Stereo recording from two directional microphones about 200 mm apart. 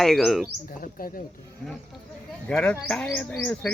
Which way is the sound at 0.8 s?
45° left (ahead or behind).